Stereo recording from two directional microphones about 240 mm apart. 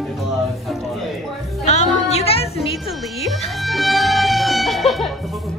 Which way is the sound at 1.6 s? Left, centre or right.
Left.